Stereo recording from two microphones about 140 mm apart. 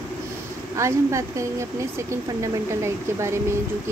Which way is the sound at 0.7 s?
20° right (ahead or behind).